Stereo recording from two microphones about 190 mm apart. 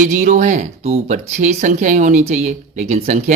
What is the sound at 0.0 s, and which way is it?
Speech, 40° right (ahead or behind).